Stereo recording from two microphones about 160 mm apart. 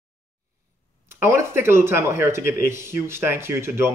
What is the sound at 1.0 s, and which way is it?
Speech, 15° right (ahead or behind).